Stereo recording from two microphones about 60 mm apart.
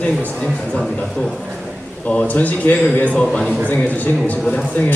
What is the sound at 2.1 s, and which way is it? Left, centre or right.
A man's voice, left.